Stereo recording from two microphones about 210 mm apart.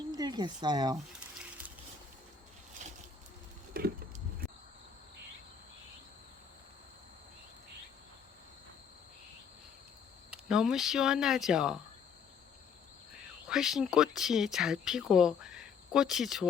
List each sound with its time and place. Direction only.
0.1 s speech: 20° right (ahead or behind)
3.8 s a sound: 45° right (ahead or behind)
10.3 s speech: 5° right (ahead or behind)
13.5 s speech: centre (ahead or behind)